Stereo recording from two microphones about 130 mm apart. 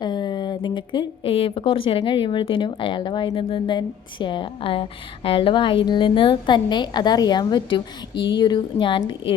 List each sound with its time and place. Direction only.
0.0 s speech: 35° left (ahead or behind)